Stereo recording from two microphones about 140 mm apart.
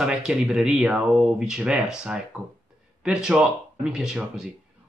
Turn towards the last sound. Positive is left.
turn(degrees=-5)  # may be behind; listen again after turning